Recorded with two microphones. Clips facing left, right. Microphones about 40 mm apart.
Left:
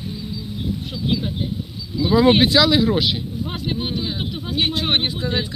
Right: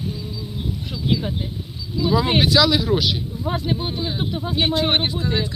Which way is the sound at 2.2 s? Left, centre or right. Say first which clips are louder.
Left 4 dB; left.